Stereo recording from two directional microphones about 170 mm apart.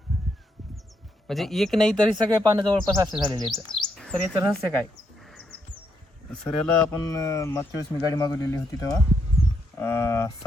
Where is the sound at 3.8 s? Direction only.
5° left (ahead or behind).